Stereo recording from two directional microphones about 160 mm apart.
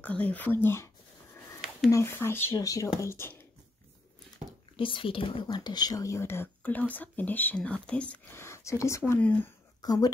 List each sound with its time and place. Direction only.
0.0 s speech: 10° left (ahead or behind)
1.9 s speech: 15° left (ahead or behind)
4.7 s speech: 35° left (ahead or behind); by 9.5 s 10° left (ahead or behind)
9.8 s speech: 25° left (ahead or behind)